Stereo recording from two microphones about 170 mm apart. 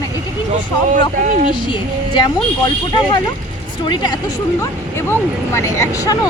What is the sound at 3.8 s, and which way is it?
Speech, 25° left (ahead or behind).